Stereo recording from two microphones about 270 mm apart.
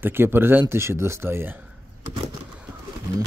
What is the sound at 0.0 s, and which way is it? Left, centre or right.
Speech, centre.